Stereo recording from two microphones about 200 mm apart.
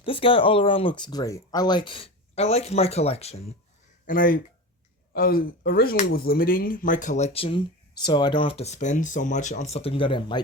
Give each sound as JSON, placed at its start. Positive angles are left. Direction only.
{"t": 0.0, "sound": "speech", "side_deg": 25}
{"t": 4.0, "sound": "speech", "side_deg": 45}